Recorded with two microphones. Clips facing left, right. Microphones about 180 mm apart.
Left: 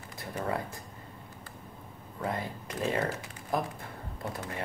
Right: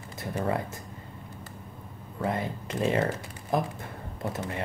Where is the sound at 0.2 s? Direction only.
25° right (ahead or behind).